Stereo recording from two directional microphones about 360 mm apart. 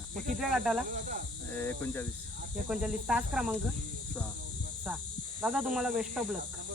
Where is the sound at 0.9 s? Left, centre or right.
Right.